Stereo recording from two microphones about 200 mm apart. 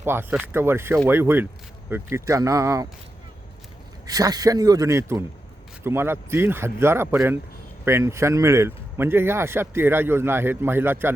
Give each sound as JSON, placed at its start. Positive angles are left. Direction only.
{"t": 0.0, "sound": "speech", "side_deg": -10}
{"t": 4.0, "sound": "speech", "side_deg": -20}